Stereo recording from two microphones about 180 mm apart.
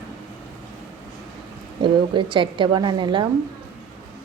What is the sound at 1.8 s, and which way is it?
A woman's voice, 25° right (ahead or behind).